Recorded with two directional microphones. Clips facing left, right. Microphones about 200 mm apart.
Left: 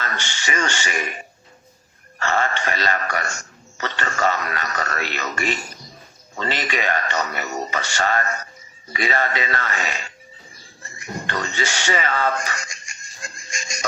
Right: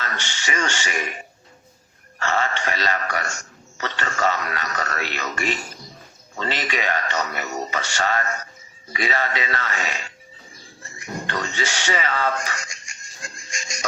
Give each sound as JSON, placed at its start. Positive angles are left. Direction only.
{"t": 0.0, "sound": "a man's voice", "side_deg": 50}
{"t": 2.1, "sound": "a man's voice", "side_deg": 50}
{"t": 6.5, "sound": "a man's voice", "side_deg": 50}
{"t": 13.5, "sound": "a sound", "side_deg": 50}